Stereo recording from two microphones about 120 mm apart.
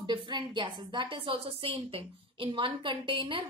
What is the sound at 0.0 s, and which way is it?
A woman's voice, 40° right (ahead or behind).